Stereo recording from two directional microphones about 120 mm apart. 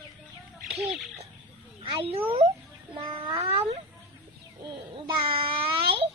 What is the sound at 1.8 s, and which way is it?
Speech, 50° right (ahead or behind).